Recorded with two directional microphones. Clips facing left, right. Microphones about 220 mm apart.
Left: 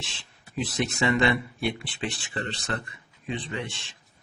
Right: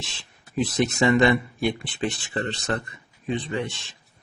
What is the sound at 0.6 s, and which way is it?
Speech, 45° right (ahead or behind).